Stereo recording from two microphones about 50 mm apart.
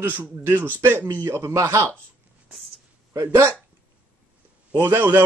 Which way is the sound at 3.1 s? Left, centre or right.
Right.